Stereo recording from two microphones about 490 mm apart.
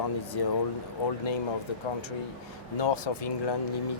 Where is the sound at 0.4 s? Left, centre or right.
Left.